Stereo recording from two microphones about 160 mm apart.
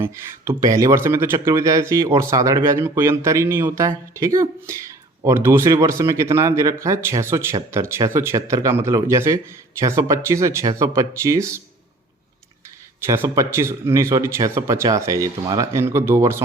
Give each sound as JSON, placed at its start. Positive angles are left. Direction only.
{"t": 0.0, "sound": "speech", "side_deg": -15}
{"t": 13.1, "sound": "speech", "side_deg": -20}